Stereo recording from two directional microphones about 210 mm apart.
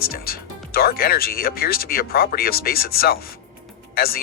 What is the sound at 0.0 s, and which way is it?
Speech, 45° left (ahead or behind).